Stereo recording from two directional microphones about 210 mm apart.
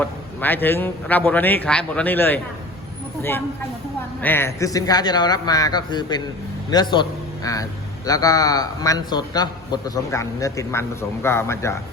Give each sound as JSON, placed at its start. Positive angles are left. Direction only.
{"t": 0.0, "sound": "a man's voice", "side_deg": 10}
{"t": 4.2, "sound": "a man's voice", "side_deg": 10}